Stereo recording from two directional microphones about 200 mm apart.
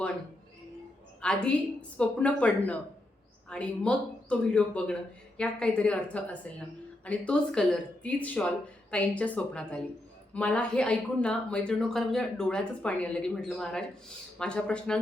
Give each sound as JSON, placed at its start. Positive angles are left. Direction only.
{"t": 1.2, "sound": "a woman's voice", "side_deg": 5}